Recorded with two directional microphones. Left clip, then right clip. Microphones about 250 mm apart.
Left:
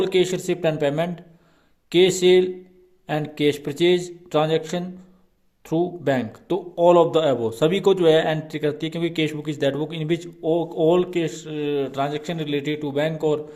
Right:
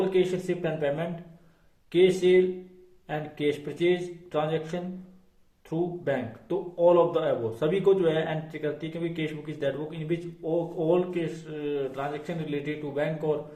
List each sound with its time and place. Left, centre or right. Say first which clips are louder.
0.0 s speech: left 5 dB; left